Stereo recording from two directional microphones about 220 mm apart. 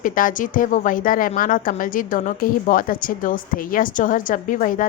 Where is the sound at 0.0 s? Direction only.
35° left (ahead or behind).